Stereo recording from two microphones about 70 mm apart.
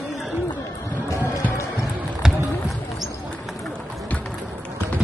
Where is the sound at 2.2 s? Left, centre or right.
Centre.